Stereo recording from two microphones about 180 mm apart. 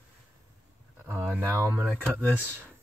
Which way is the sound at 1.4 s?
15° right (ahead or behind).